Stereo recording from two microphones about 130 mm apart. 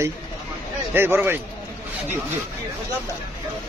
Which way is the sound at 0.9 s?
15° right (ahead or behind).